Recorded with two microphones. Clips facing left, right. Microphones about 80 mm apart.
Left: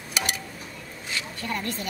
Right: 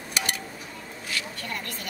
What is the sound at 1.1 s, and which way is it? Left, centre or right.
Speech, left.